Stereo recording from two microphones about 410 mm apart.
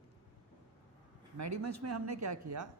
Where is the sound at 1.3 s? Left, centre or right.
Right.